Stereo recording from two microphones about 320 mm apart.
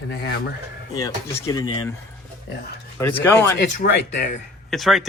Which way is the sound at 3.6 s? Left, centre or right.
Left.